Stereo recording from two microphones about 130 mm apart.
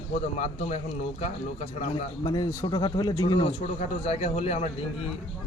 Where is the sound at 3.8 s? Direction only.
50° left (ahead or behind).